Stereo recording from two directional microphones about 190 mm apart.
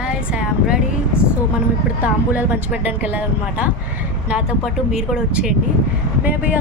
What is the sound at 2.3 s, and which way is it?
A woman's voice, 10° right (ahead or behind).